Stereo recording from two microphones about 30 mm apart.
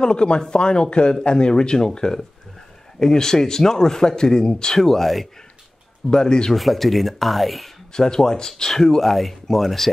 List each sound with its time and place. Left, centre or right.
0.0 s a man's voice: left; by 5.3 s centre
6.0 s a man's voice: left
6.5 s speech: centre
7.9 s speech: left; by 9.8 s centre